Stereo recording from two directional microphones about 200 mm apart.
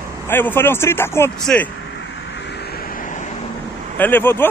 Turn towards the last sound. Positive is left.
turn(degrees=10)  # may be behind; listen again after turning